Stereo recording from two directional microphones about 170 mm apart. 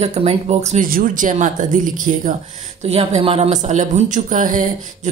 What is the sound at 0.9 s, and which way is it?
Speech, 50° right (ahead or behind).